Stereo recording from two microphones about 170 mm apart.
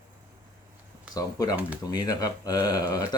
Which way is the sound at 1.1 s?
20° left (ahead or behind).